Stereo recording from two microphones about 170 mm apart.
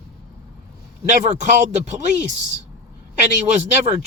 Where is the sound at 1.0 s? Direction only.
45° right (ahead or behind).